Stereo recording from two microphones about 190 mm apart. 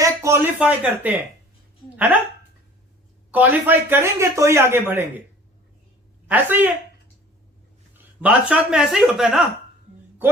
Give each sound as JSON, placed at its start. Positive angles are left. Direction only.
{"t": 0.0, "sound": "speech", "side_deg": -15}
{"t": 3.3, "sound": "speech", "side_deg": -10}
{"t": 6.2, "sound": "speech", "side_deg": -10}
{"t": 8.2, "sound": "speech", "side_deg": -5}